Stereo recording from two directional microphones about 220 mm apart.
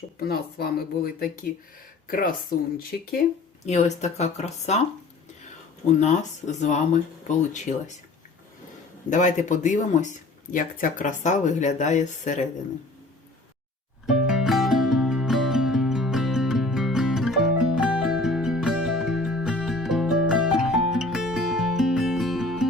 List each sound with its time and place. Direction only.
0.2 s speech: 45° left (ahead or behind)
3.7 s speech: 30° left (ahead or behind)
9.0 s speech: 35° left (ahead or behind)
14.1 s music: centre (ahead or behind)